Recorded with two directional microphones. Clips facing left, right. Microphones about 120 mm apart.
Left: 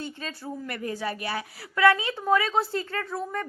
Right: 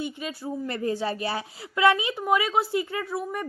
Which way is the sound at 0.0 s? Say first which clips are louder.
Right 4 dB; 15° right (ahead or behind).